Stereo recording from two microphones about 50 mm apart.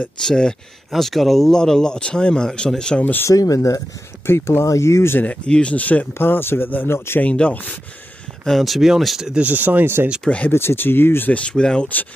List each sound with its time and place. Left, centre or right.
0.2 s speech: centre
3.0 s speech: left
3.3 s speech: left
4.3 s speech: left
5.2 s speech: left
6.1 s speech: left
7.2 s speech: left
8.5 s speech: centre
9.3 s speech: right
10.2 s speech: left
10.5 s speech: left
11.3 s speech: centre